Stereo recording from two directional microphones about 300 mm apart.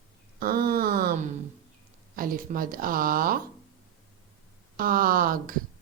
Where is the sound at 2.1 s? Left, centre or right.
Right.